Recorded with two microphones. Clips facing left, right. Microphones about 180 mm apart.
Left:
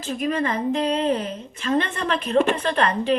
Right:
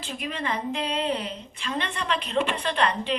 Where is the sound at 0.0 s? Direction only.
45° left (ahead or behind).